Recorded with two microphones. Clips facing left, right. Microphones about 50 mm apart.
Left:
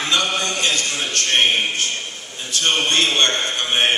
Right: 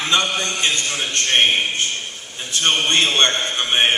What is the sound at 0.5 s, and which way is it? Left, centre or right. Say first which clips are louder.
Speech: even; right.